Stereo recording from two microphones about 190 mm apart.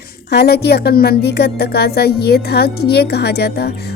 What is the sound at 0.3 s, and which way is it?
Speech, 60° left (ahead or behind).